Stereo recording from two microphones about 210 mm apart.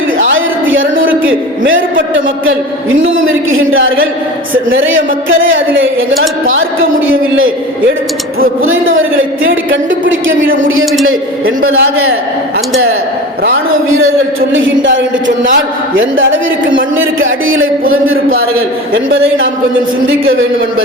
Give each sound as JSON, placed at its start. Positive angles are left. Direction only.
{"t": 0.2, "sound": "a sound", "side_deg": -65}
{"t": 1.3, "sound": "speech", "side_deg": -65}
{"t": 8.6, "sound": "speech", "side_deg": -70}
{"t": 11.0, "sound": "speech", "side_deg": -70}
{"t": 14.5, "sound": "speech", "side_deg": -65}